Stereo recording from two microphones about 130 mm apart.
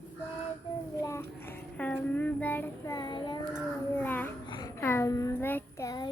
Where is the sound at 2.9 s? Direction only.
35° left (ahead or behind).